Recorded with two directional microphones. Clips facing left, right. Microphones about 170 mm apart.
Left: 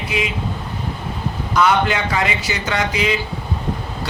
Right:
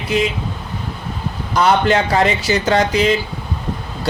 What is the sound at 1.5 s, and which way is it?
A man's voice, 35° right (ahead or behind).